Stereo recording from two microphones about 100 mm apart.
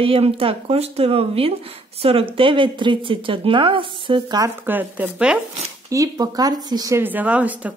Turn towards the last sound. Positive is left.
turn(degrees=-15)  # may be behind; listen again after turning